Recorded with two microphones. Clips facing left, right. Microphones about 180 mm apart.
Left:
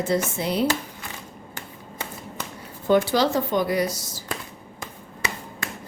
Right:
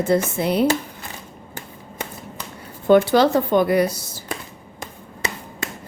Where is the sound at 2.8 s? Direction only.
60° right (ahead or behind).